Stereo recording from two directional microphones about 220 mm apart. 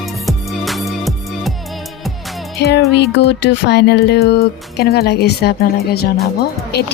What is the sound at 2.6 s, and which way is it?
Speech, 50° left (ahead or behind).